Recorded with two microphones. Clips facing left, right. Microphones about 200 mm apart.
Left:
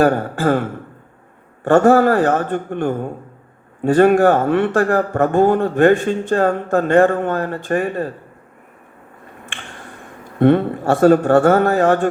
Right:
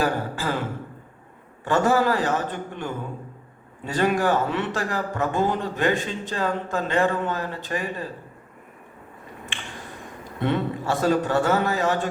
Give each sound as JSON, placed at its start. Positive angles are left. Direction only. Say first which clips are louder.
{"t": 0.0, "sound": "a man's voice", "louder": "left 9 dB", "side_deg": 55}
{"t": 10.4, "sound": "a man's voice", "louder": "left 11 dB", "side_deg": 55}